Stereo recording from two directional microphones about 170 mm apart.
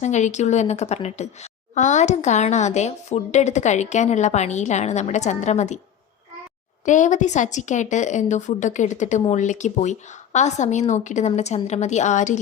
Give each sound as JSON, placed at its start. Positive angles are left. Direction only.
{"t": 0.0, "sound": "a woman's voice", "side_deg": 45}
{"t": 6.8, "sound": "a woman's voice", "side_deg": 45}